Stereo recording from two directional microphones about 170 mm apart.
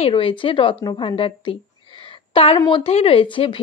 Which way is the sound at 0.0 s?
30° left (ahead or behind).